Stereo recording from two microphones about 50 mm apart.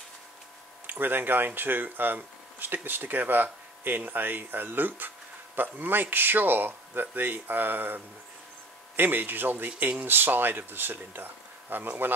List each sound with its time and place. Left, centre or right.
0.8 s speech: right